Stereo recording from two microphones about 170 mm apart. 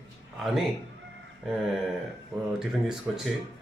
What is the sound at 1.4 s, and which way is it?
Speech, centre (ahead or behind).